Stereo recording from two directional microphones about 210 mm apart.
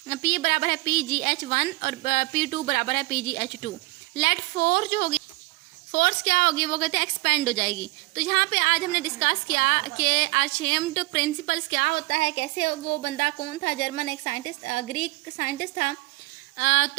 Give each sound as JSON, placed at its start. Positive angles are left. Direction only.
{"t": 0.1, "sound": "a woman's voice", "side_deg": 30}
{"t": 5.9, "sound": "a woman's voice", "side_deg": 40}
{"t": 16.6, "sound": "a woman's voice", "side_deg": 35}